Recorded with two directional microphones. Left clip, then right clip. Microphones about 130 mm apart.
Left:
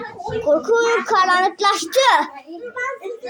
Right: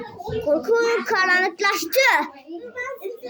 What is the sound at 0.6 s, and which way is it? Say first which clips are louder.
A child's voice: left 3 dB; 15° right (ahead or behind).